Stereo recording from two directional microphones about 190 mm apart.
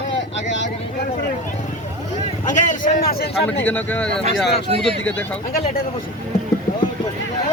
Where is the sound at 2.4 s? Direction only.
40° left (ahead or behind).